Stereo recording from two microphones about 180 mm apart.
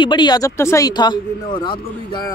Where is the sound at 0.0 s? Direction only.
25° left (ahead or behind).